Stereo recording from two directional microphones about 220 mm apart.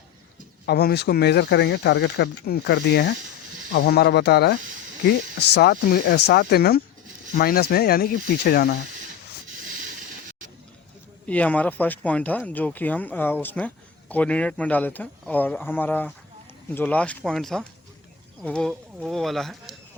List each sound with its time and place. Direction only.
0.6 s speech: 45° left (ahead or behind)
11.3 s speech: 5° left (ahead or behind)